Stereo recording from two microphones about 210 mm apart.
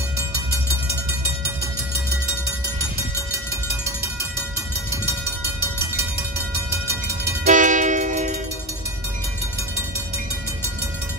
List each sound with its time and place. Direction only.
7.4 s train: 35° right (ahead or behind)